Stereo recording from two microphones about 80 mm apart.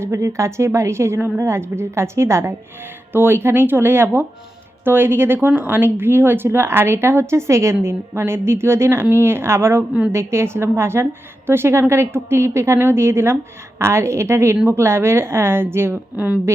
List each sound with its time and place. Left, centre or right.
0.0 s speech: right
16.1 s speech: centre